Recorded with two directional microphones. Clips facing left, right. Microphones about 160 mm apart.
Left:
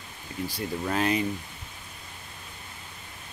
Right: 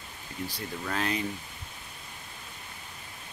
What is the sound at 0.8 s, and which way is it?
Speech, 20° left (ahead or behind).